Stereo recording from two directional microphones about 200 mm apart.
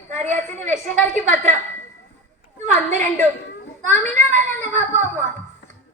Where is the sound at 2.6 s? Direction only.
40° right (ahead or behind).